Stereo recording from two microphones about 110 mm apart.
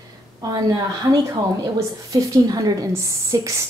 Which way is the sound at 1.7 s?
30° right (ahead or behind).